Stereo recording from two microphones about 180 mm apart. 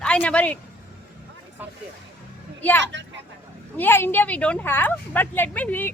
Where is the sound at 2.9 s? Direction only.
80° right.